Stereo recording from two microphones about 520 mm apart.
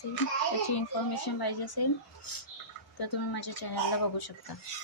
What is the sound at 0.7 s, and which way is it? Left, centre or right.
Speech, left.